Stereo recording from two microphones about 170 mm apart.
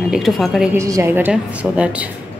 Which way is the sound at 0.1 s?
Centre (ahead or behind).